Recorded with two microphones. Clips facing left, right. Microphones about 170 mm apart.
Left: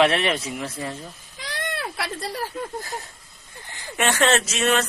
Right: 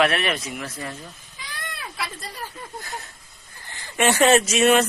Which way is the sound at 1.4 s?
90° left.